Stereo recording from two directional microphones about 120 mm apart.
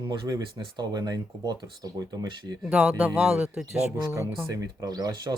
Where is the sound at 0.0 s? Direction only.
35° right (ahead or behind).